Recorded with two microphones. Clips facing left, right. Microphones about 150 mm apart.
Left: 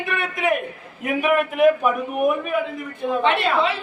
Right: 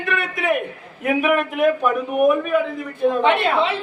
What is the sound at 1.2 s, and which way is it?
Speech, 5° left (ahead or behind).